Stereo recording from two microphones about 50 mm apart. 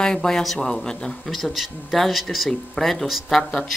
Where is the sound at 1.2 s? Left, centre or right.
Centre.